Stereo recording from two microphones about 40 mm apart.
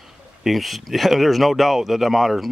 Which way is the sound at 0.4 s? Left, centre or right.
Centre.